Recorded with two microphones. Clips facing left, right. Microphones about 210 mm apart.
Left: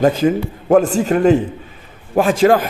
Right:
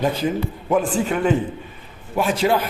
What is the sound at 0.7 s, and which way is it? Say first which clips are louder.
A man's voice: left 7 dB; 40° left (ahead or behind).